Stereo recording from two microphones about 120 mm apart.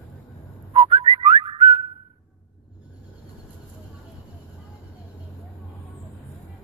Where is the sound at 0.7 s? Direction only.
50° right (ahead or behind).